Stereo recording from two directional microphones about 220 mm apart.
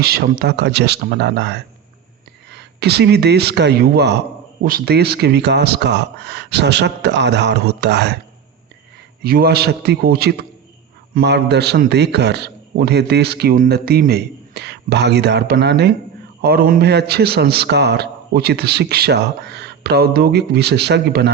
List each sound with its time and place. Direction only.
0.0 s a man's voice: 45° right (ahead or behind)
9.2 s a man's voice: 45° right (ahead or behind)